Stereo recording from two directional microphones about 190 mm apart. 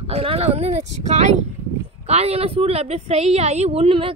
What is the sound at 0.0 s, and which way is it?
A woman's voice, 30° right (ahead or behind).